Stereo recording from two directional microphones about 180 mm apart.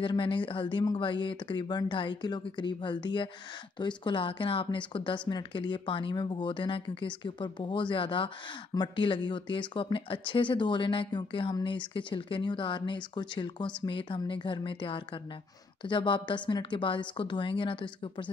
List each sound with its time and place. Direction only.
0.0 s speech: 30° left (ahead or behind)